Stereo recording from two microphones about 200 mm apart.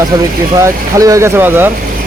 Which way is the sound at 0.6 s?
15° right (ahead or behind).